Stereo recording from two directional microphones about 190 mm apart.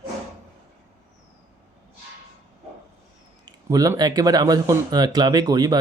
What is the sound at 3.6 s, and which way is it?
Speech, 15° right (ahead or behind).